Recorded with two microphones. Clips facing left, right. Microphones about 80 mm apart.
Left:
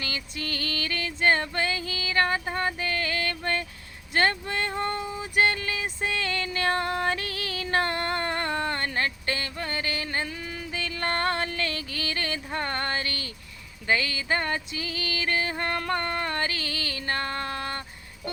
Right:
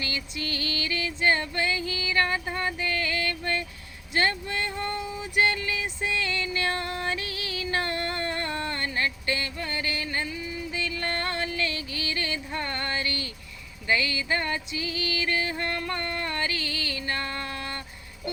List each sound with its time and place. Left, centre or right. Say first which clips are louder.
0.0 s music: right 1 dB; left
1.9 s a sound: left 1 dB; left
10.2 s music: right 2 dB; left